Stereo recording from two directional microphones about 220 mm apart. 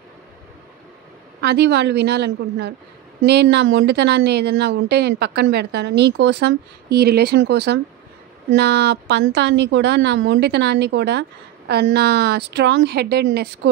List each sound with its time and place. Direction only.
1.4 s a woman's voice: 50° right (ahead or behind)